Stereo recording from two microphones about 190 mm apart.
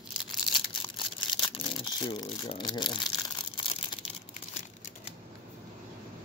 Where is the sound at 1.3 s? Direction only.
25° left (ahead or behind).